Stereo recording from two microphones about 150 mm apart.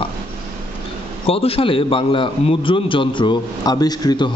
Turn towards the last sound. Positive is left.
turn(degrees=30)  # may be behind; listen again after turning